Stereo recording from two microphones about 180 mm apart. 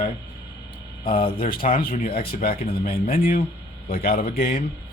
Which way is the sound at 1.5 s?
55° left (ahead or behind).